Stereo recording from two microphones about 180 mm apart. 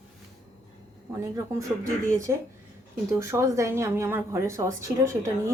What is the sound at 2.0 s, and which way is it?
A woman's voice, 15° right (ahead or behind).